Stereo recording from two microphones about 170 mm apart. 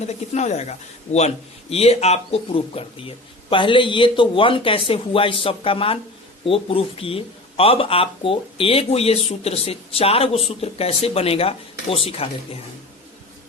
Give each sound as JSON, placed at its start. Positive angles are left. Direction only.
{"t": 0.0, "sound": "a man's voice", "side_deg": 40}